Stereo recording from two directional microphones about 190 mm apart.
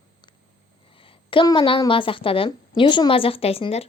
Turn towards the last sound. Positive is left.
turn(degrees=30)  # may be behind; listen again after turning